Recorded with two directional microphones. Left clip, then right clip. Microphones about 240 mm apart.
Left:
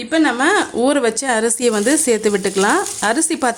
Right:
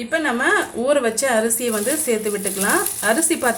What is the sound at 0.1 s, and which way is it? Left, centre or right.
A woman's voice, left.